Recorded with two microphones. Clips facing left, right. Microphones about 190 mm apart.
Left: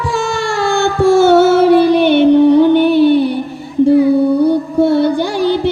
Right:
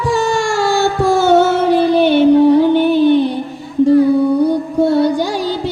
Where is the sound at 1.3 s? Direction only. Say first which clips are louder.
Left 3 dB; 70° left (ahead or behind).